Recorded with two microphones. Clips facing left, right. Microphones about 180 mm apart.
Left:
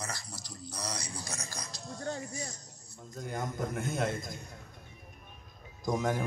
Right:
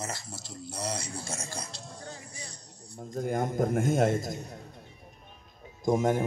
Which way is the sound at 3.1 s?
50° right (ahead or behind).